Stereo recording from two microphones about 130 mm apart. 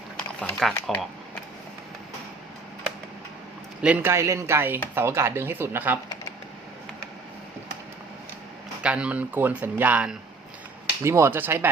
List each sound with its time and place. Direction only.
0.3 s speech: 5° left (ahead or behind)
3.8 s speech: 10° right (ahead or behind)
4.1 s speech: 20° right (ahead or behind)
8.8 s speech: 10° right (ahead or behind)
11.0 s speech: 20° right (ahead or behind)